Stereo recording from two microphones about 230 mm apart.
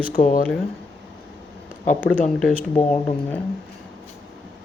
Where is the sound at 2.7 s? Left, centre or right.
Centre.